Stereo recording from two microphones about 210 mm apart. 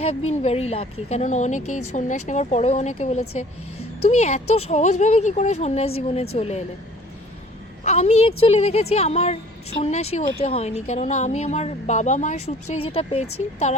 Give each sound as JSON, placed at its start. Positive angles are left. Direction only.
{"t": 0.3, "sound": "speech", "side_deg": 30}
{"t": 7.9, "sound": "speech", "side_deg": 30}